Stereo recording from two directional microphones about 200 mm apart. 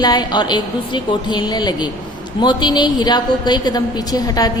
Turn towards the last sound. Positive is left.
turn(degrees=20)  # may be behind; listen again after turning